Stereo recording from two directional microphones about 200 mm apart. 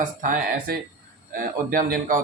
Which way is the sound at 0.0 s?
40° right (ahead or behind).